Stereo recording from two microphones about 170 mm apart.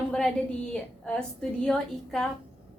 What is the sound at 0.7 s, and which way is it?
A woman's voice, 5° left (ahead or behind).